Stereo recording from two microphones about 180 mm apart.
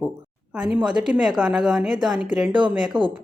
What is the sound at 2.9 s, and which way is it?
Speech, 25° right (ahead or behind).